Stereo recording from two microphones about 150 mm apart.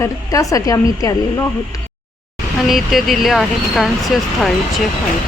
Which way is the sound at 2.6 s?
Centre (ahead or behind).